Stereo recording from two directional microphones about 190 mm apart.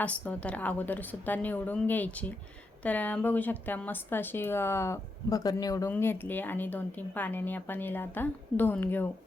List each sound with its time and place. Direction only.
0.0 s speech: 5° left (ahead or behind)